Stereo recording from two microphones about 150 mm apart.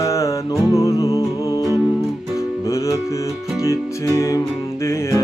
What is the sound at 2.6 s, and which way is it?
Music, 20° left (ahead or behind).